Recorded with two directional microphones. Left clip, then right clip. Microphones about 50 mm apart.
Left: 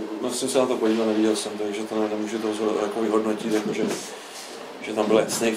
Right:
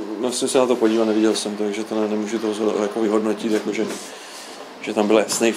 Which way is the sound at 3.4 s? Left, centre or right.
Centre.